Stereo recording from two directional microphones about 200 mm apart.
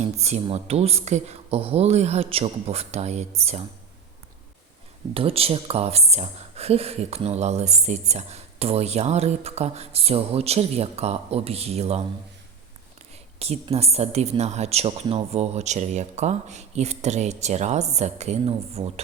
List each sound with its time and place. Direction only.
0.2 s speech: 35° right (ahead or behind)
5.1 s speech: 30° right (ahead or behind)
13.4 s speech: 30° right (ahead or behind)